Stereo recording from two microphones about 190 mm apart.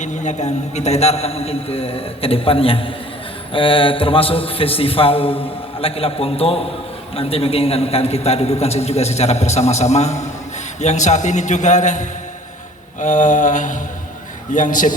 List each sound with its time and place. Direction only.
0.0 s a man's voice: 40° left (ahead or behind)